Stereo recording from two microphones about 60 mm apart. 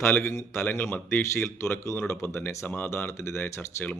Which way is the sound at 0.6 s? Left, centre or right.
Left.